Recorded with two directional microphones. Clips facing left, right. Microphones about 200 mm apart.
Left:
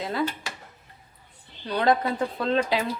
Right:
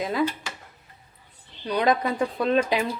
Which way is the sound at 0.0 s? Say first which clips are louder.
Right 3 dB; 15° right (ahead or behind).